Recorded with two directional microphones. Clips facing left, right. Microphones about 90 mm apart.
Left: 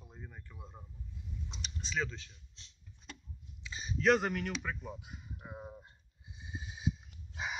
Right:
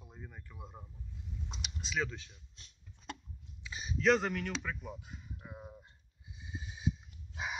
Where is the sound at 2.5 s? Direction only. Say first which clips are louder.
Right 1 dB; 45° right (ahead or behind).